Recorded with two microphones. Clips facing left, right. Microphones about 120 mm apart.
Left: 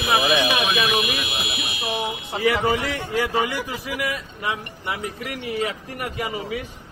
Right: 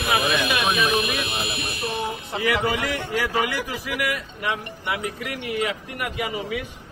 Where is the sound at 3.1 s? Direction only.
25° left (ahead or behind).